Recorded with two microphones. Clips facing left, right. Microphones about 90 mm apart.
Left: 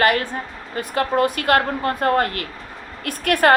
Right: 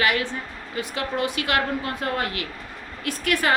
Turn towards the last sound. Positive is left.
turn(degrees=50)  # may be behind; listen again after turning